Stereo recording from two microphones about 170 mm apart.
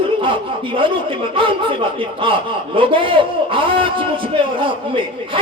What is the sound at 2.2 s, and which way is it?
A man's voice, 30° right (ahead or behind).